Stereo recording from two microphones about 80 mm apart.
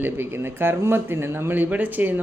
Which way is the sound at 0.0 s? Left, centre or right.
Right.